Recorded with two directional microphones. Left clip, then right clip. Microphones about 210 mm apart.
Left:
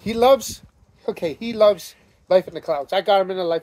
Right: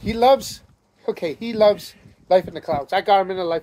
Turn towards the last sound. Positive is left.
turn(degrees=15)  # may be behind; listen again after turning